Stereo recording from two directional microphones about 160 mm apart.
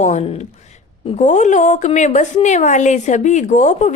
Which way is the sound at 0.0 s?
45° left (ahead or behind).